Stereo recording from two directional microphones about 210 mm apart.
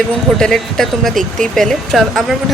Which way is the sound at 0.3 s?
5° left (ahead or behind).